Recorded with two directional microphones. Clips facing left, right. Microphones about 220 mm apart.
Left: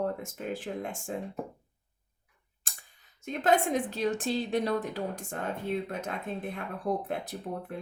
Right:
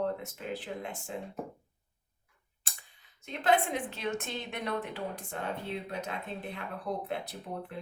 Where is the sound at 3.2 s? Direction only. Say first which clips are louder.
Left 2 dB; 45° left (ahead or behind).